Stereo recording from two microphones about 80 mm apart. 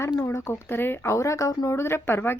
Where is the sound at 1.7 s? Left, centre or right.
Left.